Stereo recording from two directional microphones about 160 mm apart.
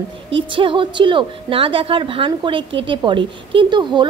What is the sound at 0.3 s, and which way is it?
A woman's voice, 35° right (ahead or behind).